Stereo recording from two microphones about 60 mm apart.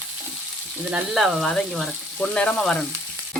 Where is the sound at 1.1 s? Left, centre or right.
Centre.